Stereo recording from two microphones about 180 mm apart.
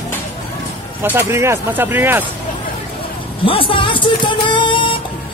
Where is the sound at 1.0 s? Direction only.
15° right (ahead or behind).